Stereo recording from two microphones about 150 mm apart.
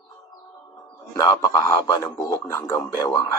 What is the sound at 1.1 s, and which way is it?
A man's voice, 20° left (ahead or behind).